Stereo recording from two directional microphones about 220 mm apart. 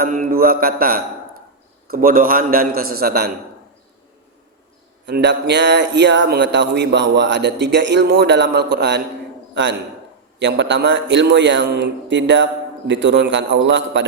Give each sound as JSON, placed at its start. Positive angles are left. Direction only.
{"t": 0.0, "sound": "a man's voice", "side_deg": -40}
{"t": 5.0, "sound": "speech", "side_deg": -50}
{"t": 10.4, "sound": "a man's voice", "side_deg": -55}